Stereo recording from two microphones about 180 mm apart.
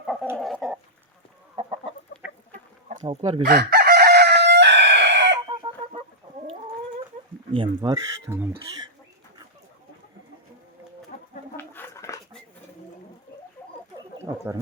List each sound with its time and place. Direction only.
0.0 s chicken: centre (ahead or behind)
1.5 s chicken: 30° right (ahead or behind)
3.0 s speech: 30° right (ahead or behind)
3.4 s chicken: 60° right (ahead or behind); by 5.4 s 75° right (ahead or behind)
5.5 s chicken: 30° right (ahead or behind)
7.5 s speech: 30° right (ahead or behind)
11.1 s chicken: 40° left (ahead or behind)
11.5 s a sound: 10° left (ahead or behind)